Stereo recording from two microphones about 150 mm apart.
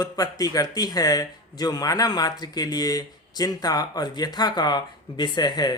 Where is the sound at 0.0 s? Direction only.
25° left (ahead or behind).